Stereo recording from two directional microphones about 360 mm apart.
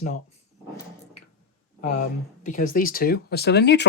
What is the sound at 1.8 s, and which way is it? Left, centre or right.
Speech, left.